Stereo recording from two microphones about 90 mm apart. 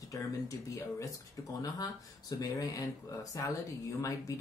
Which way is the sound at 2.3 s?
45° left (ahead or behind).